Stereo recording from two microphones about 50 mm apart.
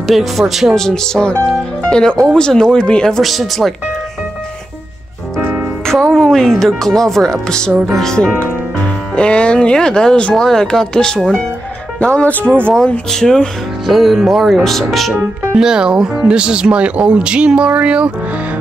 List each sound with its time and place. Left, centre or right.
0.0 s speech: centre
0.7 s speech: centre
3.2 s speech: centre
6.0 s speech: centre
10.3 s speech: centre
13.1 s speech: centre
15.5 s speech: centre